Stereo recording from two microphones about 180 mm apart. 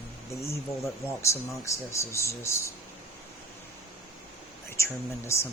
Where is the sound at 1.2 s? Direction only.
15° left (ahead or behind).